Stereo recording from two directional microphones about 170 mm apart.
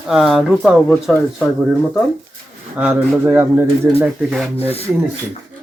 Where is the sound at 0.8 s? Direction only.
10° left (ahead or behind).